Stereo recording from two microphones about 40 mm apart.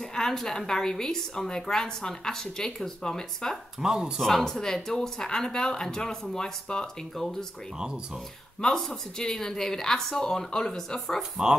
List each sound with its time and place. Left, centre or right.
0.0 s a woman's voice: centre
3.8 s speech: centre
4.2 s a woman's voice: centre
9.2 s a woman's voice: centre
11.4 s speech: centre